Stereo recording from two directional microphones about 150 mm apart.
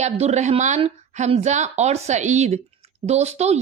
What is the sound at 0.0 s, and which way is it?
Speech, 50° right (ahead or behind).